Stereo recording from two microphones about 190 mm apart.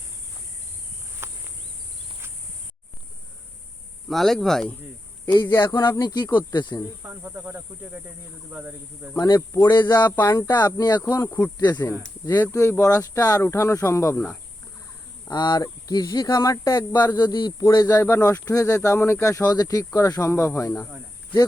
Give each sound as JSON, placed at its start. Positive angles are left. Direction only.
{"t": 1.2, "sound": "a sound", "side_deg": -15}
{"t": 4.1, "sound": "speech", "side_deg": 0}
{"t": 5.6, "sound": "speech", "side_deg": 20}
{"t": 7.0, "sound": "speech", "side_deg": -10}
{"t": 9.1, "sound": "speech", "side_deg": 20}